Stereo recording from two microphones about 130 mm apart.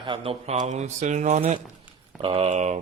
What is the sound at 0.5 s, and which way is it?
Speech, 65° right (ahead or behind).